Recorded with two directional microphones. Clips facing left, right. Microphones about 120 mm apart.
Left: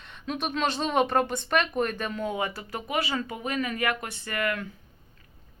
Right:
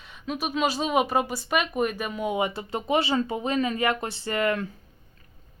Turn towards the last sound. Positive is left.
turn(degrees=-25)  # may be behind; listen again after turning